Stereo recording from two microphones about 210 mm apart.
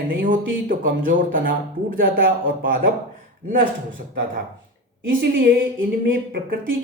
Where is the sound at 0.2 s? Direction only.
40° right (ahead or behind).